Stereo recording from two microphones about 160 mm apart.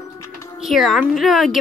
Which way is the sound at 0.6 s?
Centre (ahead or behind).